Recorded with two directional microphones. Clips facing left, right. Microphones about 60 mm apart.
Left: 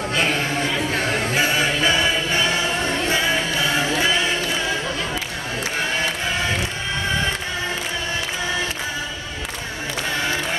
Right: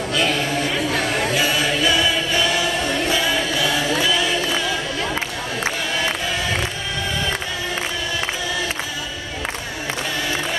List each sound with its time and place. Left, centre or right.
0.1 s a sound: left
1.3 s choir: left
4.0 s music: left